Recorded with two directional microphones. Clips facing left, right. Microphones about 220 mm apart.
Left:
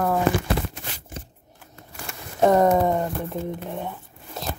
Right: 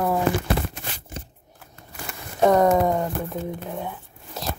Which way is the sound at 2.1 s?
Centre (ahead or behind).